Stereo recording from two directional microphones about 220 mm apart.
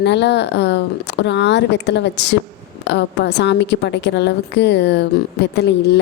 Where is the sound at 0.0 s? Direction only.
50° left (ahead or behind).